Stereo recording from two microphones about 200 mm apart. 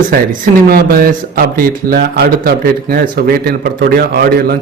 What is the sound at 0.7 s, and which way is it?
A man's voice, 50° right (ahead or behind).